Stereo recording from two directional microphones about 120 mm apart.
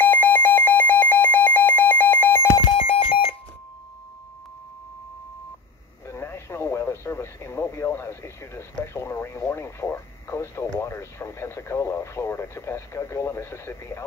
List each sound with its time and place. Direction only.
0.1 s alarm: 15° left (ahead or behind)
2.8 s telephone dialing: 55° left (ahead or behind)
6.0 s speech: 20° left (ahead or behind)